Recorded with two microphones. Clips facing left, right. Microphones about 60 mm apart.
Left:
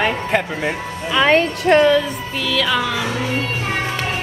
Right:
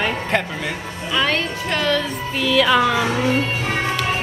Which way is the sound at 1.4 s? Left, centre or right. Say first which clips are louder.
Left 9 dB; left.